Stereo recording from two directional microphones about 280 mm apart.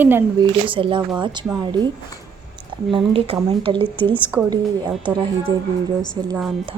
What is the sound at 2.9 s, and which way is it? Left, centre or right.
A woman's voice, centre.